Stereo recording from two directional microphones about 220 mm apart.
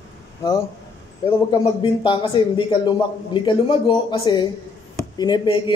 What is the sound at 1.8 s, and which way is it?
A man's voice, 20° left (ahead or behind).